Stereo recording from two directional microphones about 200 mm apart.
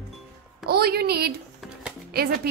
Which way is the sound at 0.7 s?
50° right (ahead or behind).